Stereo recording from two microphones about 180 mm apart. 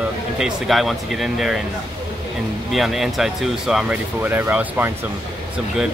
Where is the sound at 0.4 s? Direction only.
Centre (ahead or behind).